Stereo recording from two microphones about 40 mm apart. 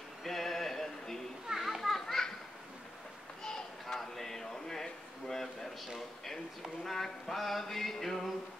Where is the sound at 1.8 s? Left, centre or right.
Centre.